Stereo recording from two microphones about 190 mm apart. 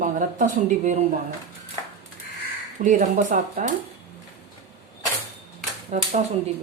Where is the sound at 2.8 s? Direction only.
40° right (ahead or behind).